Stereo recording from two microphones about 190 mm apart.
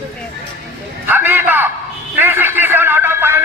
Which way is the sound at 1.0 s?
10° right (ahead or behind).